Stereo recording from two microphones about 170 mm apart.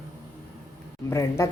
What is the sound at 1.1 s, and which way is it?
Speech, 15° left (ahead or behind).